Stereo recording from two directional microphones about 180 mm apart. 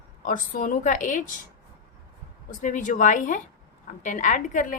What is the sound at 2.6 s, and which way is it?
A woman's voice, 45° left (ahead or behind).